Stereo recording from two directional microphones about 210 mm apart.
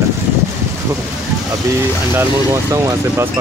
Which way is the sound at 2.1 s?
10° right (ahead or behind).